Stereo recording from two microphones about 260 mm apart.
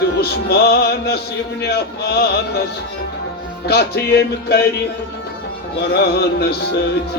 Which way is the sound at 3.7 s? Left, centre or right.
Left.